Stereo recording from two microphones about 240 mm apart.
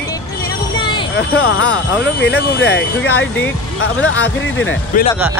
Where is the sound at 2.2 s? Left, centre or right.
Left.